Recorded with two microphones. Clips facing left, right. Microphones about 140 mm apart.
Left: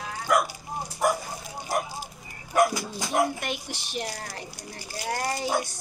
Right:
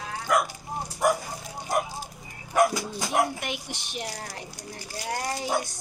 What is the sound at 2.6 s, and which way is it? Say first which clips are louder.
Bow-wow: right 1 dB; centre (ahead or behind).